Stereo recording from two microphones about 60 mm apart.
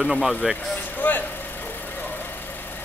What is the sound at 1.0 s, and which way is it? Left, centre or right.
Vehicle, left.